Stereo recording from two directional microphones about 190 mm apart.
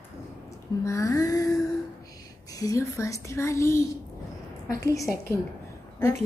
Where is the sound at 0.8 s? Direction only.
15° left (ahead or behind).